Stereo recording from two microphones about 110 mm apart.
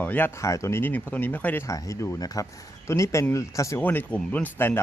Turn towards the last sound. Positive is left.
turn(degrees=15)  # may be behind; listen again after turning